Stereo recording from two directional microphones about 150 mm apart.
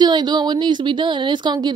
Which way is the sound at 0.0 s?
30° right (ahead or behind).